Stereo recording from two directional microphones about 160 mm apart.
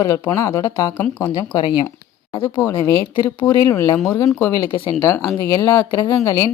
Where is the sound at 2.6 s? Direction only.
15° left (ahead or behind).